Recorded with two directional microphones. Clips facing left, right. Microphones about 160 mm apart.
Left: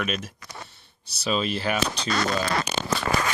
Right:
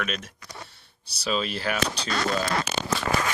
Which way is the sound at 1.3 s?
Centre (ahead or behind).